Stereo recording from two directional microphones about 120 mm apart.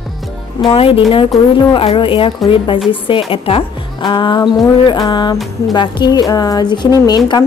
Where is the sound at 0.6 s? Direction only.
50° left (ahead or behind).